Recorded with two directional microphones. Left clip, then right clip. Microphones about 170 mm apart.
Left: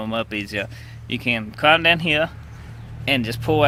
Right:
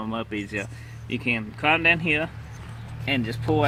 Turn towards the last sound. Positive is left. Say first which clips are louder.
# left 4 dB
turn(degrees=25)  # may be behind; listen again after turning